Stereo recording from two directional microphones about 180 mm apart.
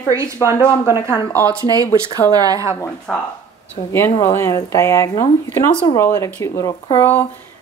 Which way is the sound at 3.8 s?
25° left (ahead or behind).